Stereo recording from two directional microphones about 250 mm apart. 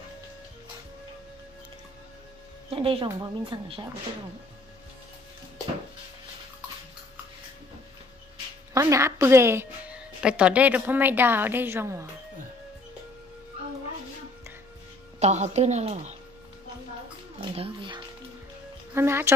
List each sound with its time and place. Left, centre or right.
2.7 s speech: right
8.7 s a woman's voice: centre
15.1 s speech: right
17.6 s a woman's voice: right